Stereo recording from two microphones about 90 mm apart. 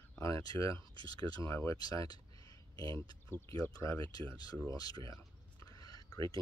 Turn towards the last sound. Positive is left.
turn(degrees=45)  # may be behind; listen again after turning